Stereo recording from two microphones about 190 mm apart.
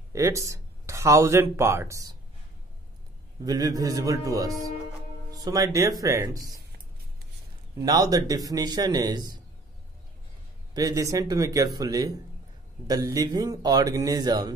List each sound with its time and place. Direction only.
0.1 s speech: 15° right (ahead or behind)
3.4 s speech: 20° right (ahead or behind)
7.8 s speech: 20° right (ahead or behind)
10.7 s speech: 20° right (ahead or behind)